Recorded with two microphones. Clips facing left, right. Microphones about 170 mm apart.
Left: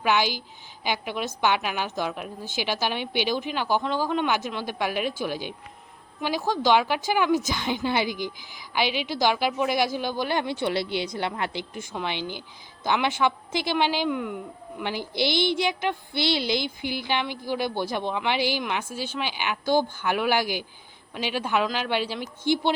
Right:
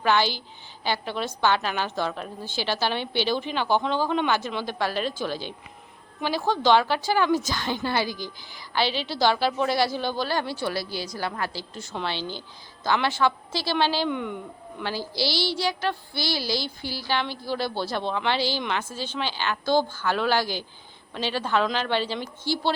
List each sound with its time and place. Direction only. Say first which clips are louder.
0.0 s a woman's voice: right 1 dB; 10° left (ahead or behind)
14.1 s a woman's voice: left 1 dB; 5° left (ahead or behind)
14.8 s a woman's voice: left 2 dB; 20° left (ahead or behind)